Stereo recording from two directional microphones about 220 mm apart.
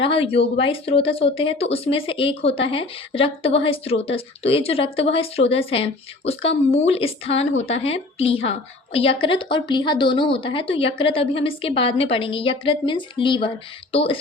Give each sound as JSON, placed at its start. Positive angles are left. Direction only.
{"t": 0.0, "sound": "speech", "side_deg": 25}